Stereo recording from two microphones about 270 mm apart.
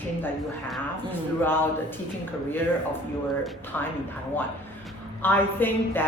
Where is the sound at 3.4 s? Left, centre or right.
Centre.